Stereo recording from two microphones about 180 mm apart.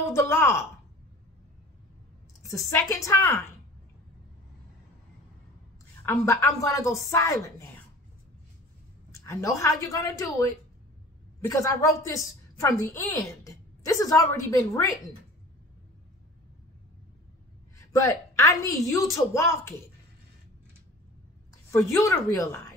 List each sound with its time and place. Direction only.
0.1 s a woman's voice: 15° left (ahead or behind)
2.4 s a woman's voice: 15° left (ahead or behind)
6.0 s a woman's voice: 15° left (ahead or behind)
9.2 s a woman's voice: 15° left (ahead or behind)
17.7 s a woman's voice: 15° left (ahead or behind)
21.7 s a woman's voice: 15° left (ahead or behind)